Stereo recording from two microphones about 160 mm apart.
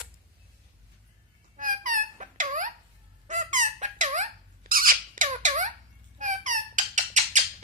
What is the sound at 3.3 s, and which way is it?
Squeak, 50° right (ahead or behind).